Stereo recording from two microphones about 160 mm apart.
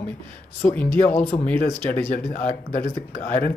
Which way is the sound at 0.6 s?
10° left (ahead or behind).